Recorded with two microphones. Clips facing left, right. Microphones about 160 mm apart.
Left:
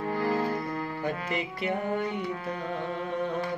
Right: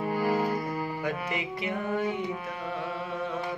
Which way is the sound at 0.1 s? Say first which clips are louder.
Right 1 dB; 10° right (ahead or behind).